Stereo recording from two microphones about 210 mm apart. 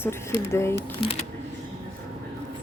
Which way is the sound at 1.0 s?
30° left (ahead or behind).